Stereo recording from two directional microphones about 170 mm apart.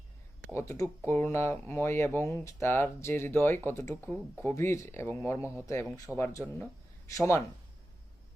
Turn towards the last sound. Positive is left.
turn(degrees=15)  # may be behind; listen again after turning